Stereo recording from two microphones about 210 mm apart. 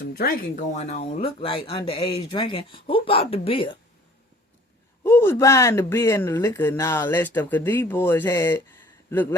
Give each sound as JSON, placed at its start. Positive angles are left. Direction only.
{"t": 0.0, "sound": "speech", "side_deg": 50}
{"t": 5.0, "sound": "speech", "side_deg": 10}